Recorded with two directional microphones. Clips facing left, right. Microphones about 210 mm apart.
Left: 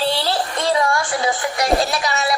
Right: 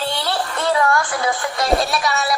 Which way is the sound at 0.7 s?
20° left (ahead or behind).